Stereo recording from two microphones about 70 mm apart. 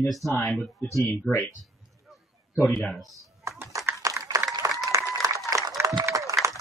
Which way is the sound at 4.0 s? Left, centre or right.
Right.